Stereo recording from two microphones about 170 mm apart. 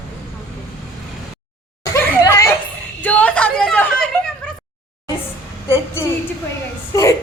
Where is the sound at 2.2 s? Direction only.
15° left (ahead or behind).